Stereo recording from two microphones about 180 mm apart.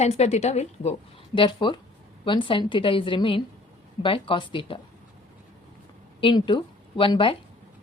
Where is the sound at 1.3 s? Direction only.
25° left (ahead or behind).